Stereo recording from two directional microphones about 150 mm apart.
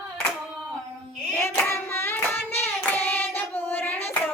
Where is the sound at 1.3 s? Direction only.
15° left (ahead or behind).